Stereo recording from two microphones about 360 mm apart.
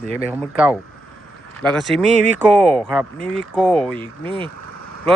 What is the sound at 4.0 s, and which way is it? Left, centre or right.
Speech, centre.